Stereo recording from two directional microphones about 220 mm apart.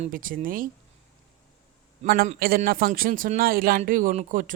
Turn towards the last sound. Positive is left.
turn(degrees=-35)  # may be behind; listen again after turning